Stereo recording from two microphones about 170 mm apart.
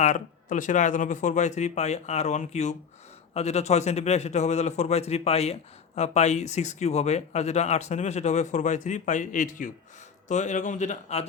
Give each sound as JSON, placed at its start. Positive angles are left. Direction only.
{"t": 0.0, "sound": "a man's voice", "side_deg": 50}